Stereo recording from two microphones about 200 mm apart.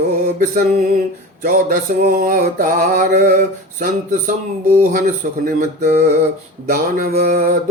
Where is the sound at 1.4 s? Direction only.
45° right (ahead or behind).